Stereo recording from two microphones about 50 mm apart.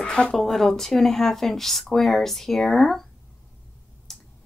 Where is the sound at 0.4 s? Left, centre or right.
Centre.